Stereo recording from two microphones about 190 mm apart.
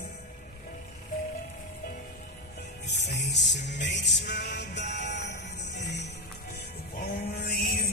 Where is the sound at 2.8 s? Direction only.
65° left (ahead or behind).